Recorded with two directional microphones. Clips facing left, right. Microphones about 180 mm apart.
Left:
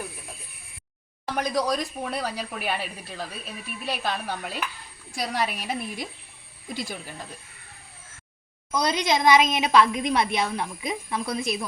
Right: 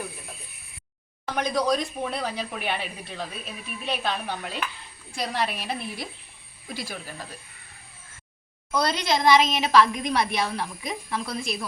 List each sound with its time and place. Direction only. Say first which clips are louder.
1.2 s a woman's voice: even; 5° left (ahead or behind); by 7.3 s 20° left (ahead or behind)
8.7 s a woman's voice: left 1 dB; 15° left (ahead or behind)